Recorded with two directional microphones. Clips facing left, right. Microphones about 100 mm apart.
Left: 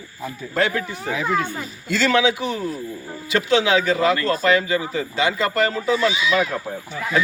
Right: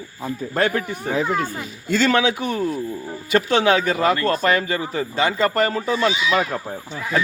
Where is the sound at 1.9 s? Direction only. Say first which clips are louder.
Even; 45° right (ahead or behind).